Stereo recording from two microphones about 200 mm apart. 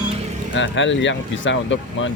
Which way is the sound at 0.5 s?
65° left (ahead or behind).